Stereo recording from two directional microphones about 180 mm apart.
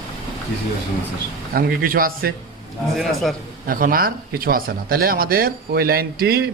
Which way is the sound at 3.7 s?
50° right (ahead or behind).